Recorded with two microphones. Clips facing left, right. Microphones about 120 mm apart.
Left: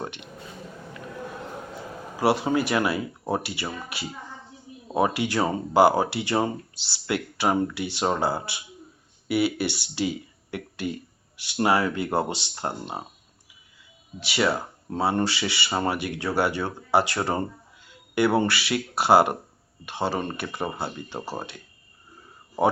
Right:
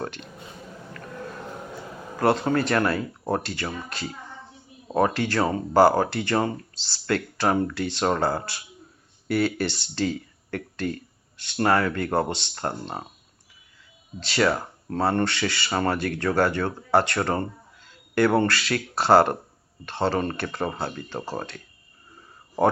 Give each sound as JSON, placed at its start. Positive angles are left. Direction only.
{"t": 0.0, "sound": "speech", "side_deg": 15}
{"t": 2.1, "sound": "speech", "side_deg": 5}
{"t": 14.2, "sound": "speech", "side_deg": 5}